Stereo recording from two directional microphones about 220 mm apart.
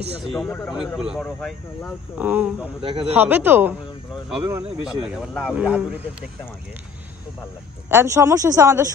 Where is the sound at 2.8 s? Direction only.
25° right (ahead or behind).